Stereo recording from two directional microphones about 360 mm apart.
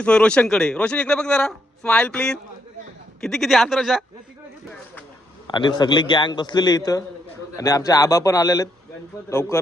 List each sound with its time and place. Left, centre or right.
0.0 s a man's voice: centre
5.5 s a man's voice: centre